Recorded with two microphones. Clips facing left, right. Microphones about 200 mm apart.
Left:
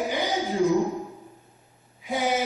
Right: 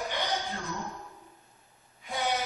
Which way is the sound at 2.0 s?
5° left (ahead or behind).